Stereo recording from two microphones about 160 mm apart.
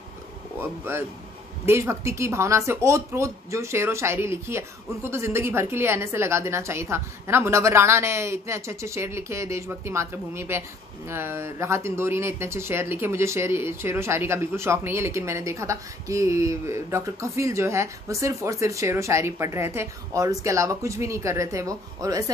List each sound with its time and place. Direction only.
0.6 s speech: 15° right (ahead or behind)